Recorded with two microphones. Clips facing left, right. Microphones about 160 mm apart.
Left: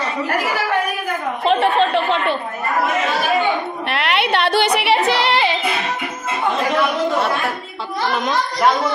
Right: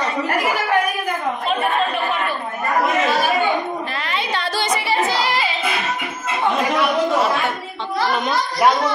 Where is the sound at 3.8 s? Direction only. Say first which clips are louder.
Left 5 dB; 70° left (ahead or behind).